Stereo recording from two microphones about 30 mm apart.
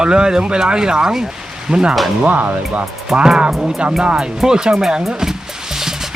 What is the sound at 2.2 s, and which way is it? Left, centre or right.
Speech, right.